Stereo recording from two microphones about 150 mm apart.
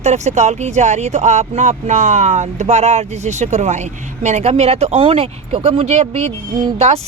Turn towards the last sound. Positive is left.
turn(degrees=-45)  # may be behind; listen again after turning